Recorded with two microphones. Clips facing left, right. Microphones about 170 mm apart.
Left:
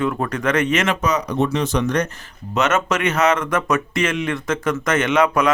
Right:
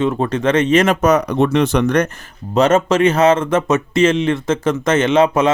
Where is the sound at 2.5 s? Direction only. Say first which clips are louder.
Right 7 dB; 30° right (ahead or behind).